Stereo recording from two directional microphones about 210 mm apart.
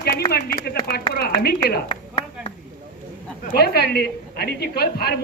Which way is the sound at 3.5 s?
50° left (ahead or behind).